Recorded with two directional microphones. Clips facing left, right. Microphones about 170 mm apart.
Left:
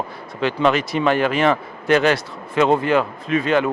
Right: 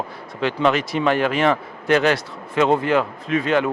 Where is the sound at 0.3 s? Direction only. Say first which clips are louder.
Left 1 dB; 15° left (ahead or behind).